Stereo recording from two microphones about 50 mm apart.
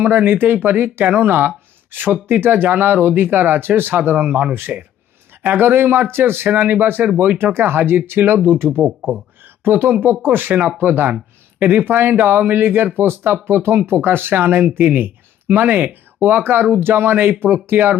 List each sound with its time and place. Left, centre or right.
0.3 s speech: right
4.7 s speech: right
5.4 s speech: right
6.5 s speech: right